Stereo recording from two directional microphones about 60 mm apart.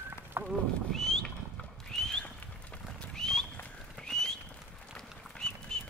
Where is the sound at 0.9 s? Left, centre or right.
Centre.